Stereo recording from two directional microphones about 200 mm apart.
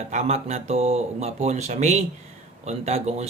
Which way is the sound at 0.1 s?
35° right (ahead or behind).